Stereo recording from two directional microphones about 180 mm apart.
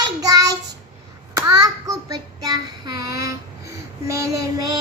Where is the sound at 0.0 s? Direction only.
20° right (ahead or behind).